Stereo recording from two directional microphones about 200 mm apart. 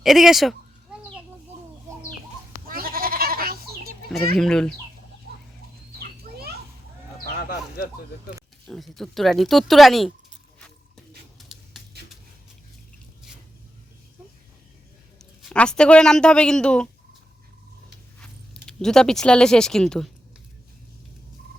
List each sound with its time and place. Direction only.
0.0 s speech: centre (ahead or behind)
2.6 s goat: 45° right (ahead or behind)
4.4 s speech: 5° left (ahead or behind)
6.0 s a sound: 50° right (ahead or behind)
7.3 s a sound: 50° left (ahead or behind)
8.6 s speech: centre (ahead or behind)
15.2 s speech: 5° left (ahead or behind)
18.2 s speech: 5° left (ahead or behind)